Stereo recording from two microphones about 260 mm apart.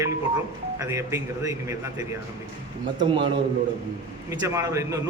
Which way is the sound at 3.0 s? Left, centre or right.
Centre.